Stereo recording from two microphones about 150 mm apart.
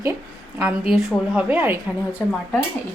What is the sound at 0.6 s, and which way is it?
A woman's voice, 5° right (ahead or behind).